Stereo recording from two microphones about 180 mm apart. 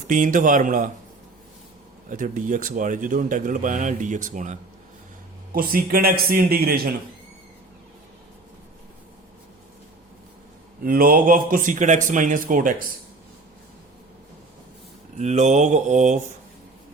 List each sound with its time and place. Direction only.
0.1 s speech: 45° right (ahead or behind)
2.0 s speech: 50° right (ahead or behind)
5.5 s a man's voice: 55° right (ahead or behind)
10.8 s speech: 50° right (ahead or behind)
15.2 s mantra: 40° right (ahead or behind)